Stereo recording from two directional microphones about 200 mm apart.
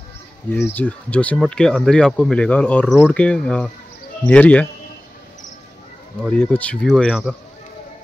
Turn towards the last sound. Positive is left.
turn(degrees=0)  # may be behind; listen again after turning